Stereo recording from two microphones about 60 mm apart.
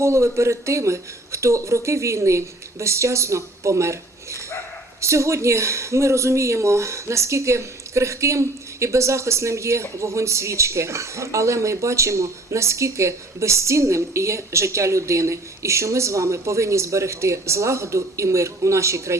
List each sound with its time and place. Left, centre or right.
0.0 s speech: right